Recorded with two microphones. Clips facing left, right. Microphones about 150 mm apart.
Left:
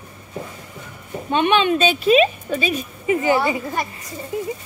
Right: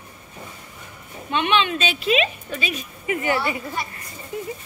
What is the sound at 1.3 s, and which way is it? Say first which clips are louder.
A woman's voice: left 4 dB; 40° left (ahead or behind).